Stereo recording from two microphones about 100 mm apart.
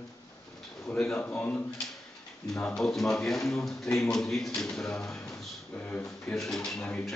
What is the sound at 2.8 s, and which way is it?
Speech, 5° left (ahead or behind).